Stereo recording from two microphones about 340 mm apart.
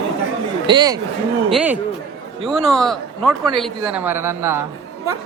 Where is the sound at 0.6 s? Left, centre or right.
Centre.